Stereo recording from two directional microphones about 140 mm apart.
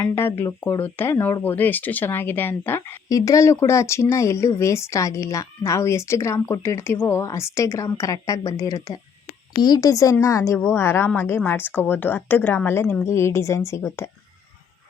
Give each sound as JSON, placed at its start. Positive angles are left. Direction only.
{"t": 0.0, "sound": "a woman's voice", "side_deg": 15}